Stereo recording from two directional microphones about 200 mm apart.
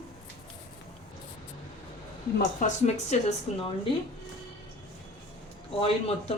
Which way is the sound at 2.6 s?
35° left (ahead or behind).